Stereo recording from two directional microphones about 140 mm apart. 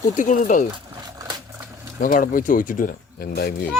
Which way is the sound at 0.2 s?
65° left (ahead or behind).